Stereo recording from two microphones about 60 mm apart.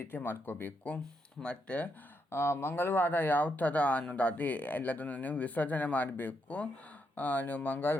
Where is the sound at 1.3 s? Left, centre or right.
Centre.